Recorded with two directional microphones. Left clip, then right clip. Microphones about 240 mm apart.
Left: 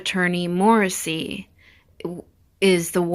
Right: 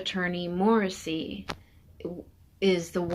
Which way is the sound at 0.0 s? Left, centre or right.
Left.